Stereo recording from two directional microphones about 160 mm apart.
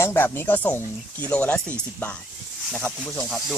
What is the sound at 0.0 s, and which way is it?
Speech, 15° left (ahead or behind).